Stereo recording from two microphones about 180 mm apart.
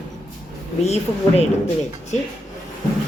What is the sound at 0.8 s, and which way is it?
Speech, 35° left (ahead or behind).